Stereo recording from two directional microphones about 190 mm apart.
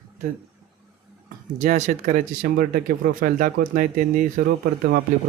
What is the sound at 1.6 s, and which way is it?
Speech, 40° right (ahead or behind).